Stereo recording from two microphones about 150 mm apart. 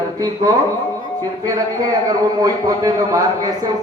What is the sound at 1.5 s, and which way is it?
A man's voice, 25° right (ahead or behind).